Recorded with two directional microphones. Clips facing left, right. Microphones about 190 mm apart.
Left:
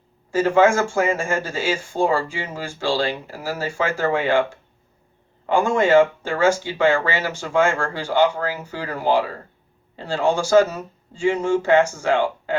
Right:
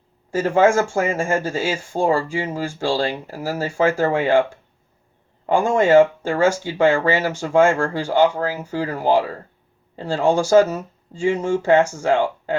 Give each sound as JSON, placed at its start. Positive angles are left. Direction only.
{"t": 0.3, "sound": "speech", "side_deg": -40}
{"t": 5.5, "sound": "speech", "side_deg": -40}